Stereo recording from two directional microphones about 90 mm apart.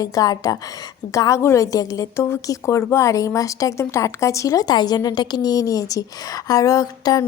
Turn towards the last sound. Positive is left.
turn(degrees=40)  # may be behind; listen again after turning